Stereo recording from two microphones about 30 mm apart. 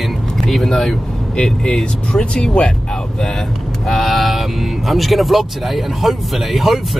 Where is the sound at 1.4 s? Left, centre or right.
Centre.